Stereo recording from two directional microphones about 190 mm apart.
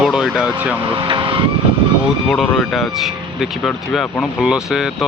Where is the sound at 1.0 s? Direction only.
25° right (ahead or behind).